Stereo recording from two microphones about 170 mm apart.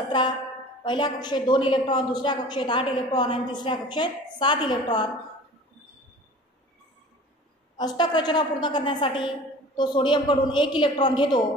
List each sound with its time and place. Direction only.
0.8 s a woman's voice: 25° left (ahead or behind)
7.7 s a woman's voice: 25° left (ahead or behind)